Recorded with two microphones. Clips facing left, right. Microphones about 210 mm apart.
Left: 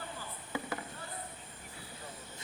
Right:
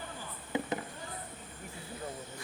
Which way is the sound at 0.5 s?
20° right (ahead or behind).